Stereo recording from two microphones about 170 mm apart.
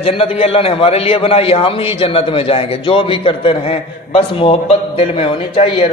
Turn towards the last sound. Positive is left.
turn(degrees=35)  # may be behind; listen again after turning